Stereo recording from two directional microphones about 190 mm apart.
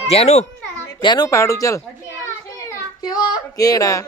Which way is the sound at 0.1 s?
35° left (ahead or behind).